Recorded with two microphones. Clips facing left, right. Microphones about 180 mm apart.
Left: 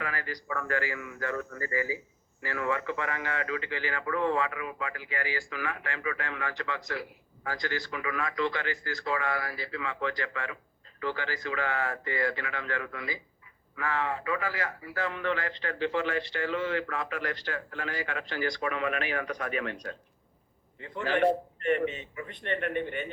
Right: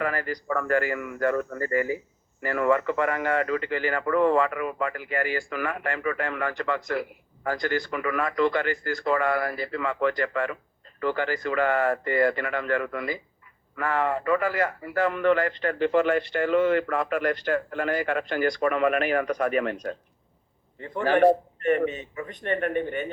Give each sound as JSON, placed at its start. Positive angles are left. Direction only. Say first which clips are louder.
{"t": 0.0, "sound": "speech", "louder": "right 8 dB", "side_deg": -50}